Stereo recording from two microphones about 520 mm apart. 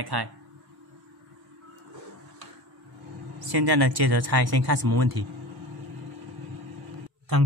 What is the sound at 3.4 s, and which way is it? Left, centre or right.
Speech, right.